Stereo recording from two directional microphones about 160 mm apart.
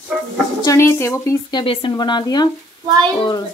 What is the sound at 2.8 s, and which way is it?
Speech, 25° right (ahead or behind).